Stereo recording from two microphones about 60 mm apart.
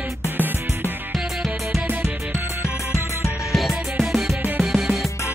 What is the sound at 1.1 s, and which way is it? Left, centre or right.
Music, centre.